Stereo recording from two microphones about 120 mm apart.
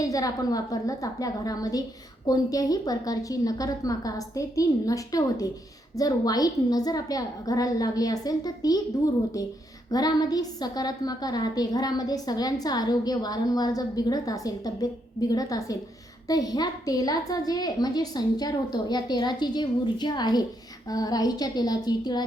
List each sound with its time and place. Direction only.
0.0 s a woman's voice: 30° left (ahead or behind)
9.9 s a woman's voice: 35° left (ahead or behind)